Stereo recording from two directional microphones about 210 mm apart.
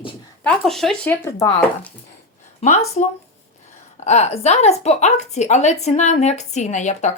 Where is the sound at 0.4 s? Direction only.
Centre (ahead or behind).